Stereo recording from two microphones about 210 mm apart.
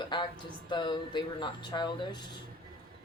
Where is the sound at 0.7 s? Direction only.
20° left (ahead or behind).